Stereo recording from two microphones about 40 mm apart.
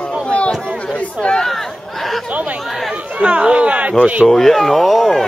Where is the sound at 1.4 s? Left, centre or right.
Centre.